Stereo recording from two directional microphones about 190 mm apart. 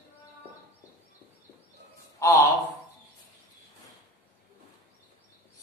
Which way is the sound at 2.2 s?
15° left (ahead or behind).